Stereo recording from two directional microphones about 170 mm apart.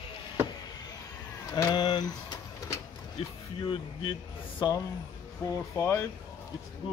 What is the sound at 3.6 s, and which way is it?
Speech, 30° left (ahead or behind).